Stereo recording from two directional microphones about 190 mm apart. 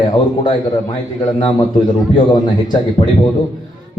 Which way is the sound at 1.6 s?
25° left (ahead or behind).